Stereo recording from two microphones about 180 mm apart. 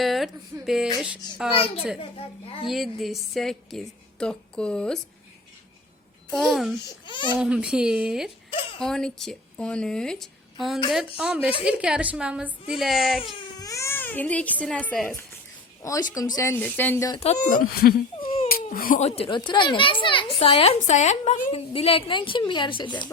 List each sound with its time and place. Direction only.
0.0 s a sound: centre (ahead or behind)
0.6 s a woman's voice: centre (ahead or behind)
1.5 s a child's voice: 30° left (ahead or behind)
2.6 s a woman's voice: centre (ahead or behind)
6.3 s a woman's voice: centre (ahead or behind)
7.0 s speech: 25° left (ahead or behind)
7.3 s a woman's voice: 5° right (ahead or behind)
13.6 s speech: 20° left (ahead or behind)
15.8 s speech: 20° left (ahead or behind)
17.5 s speech: 55° left (ahead or behind)
18.2 s a sound: 30° left (ahead or behind)
18.4 s a child's voice: 55° left (ahead or behind); by 23.0 s 25° left (ahead or behind)